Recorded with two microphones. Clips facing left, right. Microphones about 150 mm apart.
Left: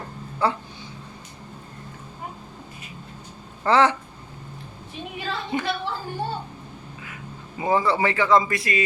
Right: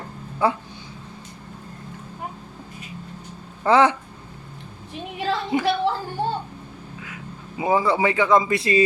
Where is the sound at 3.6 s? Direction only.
15° right (ahead or behind).